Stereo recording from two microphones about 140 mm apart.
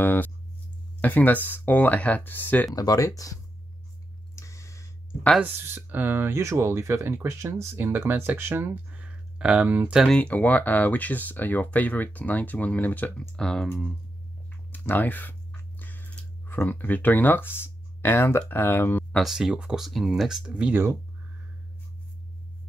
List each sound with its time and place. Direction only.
0.0 s speech: 15° left (ahead or behind)
2.7 s speech: 25° left (ahead or behind)
4.4 s a sound: 20° left (ahead or behind)
5.4 s speech: 15° right (ahead or behind)
10.0 s speech: 10° left (ahead or behind)
19.1 s speech: 5° right (ahead or behind)